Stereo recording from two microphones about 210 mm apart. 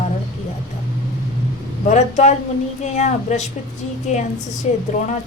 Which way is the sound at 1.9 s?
35° left (ahead or behind).